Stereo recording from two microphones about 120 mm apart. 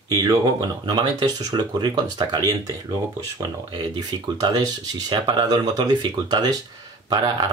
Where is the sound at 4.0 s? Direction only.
35° right (ahead or behind).